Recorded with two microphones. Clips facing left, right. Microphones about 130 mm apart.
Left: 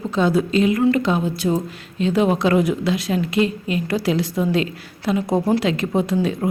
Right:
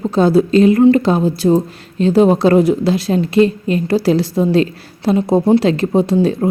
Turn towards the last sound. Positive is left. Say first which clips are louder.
# right 6 dB
turn(degrees=-30)  # may be behind; listen again after turning